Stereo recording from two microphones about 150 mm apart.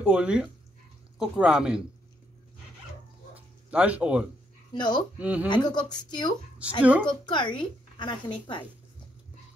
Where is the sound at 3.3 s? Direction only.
10° right (ahead or behind).